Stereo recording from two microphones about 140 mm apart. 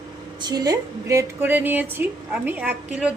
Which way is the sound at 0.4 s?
30° right (ahead or behind).